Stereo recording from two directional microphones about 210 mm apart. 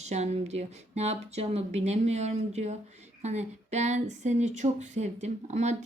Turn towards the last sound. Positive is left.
turn(degrees=-30)  # may be behind; listen again after turning